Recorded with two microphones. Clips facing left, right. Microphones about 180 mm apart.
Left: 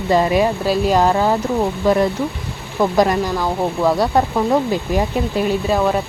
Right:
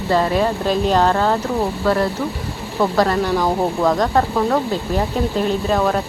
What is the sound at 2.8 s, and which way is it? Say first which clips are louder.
Speech: left 1 dB; 15° left (ahead or behind).